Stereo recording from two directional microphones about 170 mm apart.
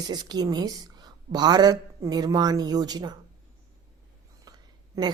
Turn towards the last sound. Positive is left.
turn(degrees=-20)  # may be behind; listen again after turning